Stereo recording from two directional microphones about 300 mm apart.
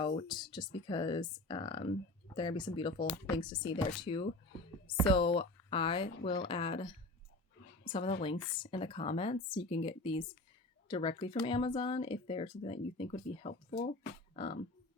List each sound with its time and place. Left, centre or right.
0.0 s speech: centre
13.5 s speech: left
14.4 s speech: centre